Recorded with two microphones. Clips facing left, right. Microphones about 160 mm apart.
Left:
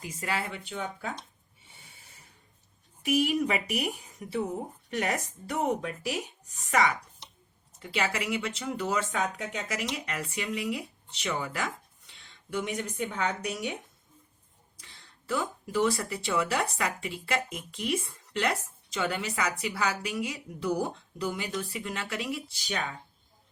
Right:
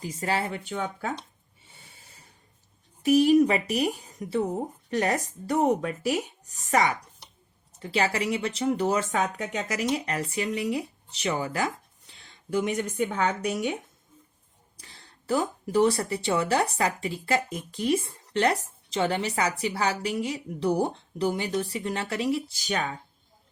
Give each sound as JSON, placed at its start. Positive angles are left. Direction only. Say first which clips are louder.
{"t": 0.0, "sound": "speech", "louder": "right 5 dB", "side_deg": -35}
{"t": 3.0, "sound": "speech", "louder": "right 8 dB", "side_deg": -35}
{"t": 15.3, "sound": "speech", "louder": "right 5 dB", "side_deg": -35}